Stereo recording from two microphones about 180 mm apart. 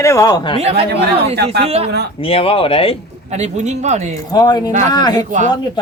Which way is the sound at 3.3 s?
40° right (ahead or behind).